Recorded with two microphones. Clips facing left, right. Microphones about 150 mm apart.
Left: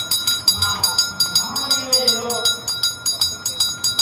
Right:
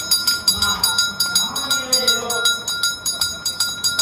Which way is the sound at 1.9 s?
10° left (ahead or behind).